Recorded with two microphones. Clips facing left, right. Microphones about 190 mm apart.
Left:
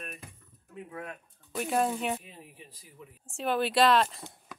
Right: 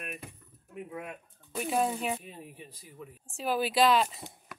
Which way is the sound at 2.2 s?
45° right (ahead or behind).